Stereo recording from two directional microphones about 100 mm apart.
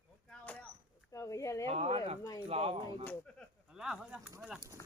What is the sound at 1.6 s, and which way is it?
Speech, 85° right.